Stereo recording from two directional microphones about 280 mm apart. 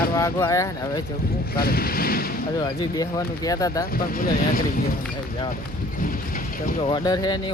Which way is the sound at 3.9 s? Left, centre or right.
Left.